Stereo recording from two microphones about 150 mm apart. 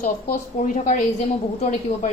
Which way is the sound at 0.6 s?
55° left (ahead or behind).